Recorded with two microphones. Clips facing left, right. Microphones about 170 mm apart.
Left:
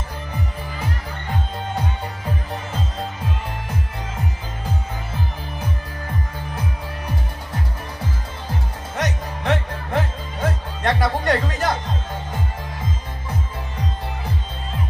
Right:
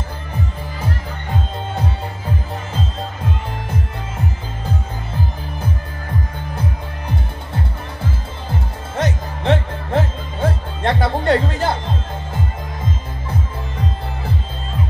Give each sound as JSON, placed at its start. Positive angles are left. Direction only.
{"t": 8.9, "sound": "music", "side_deg": -25}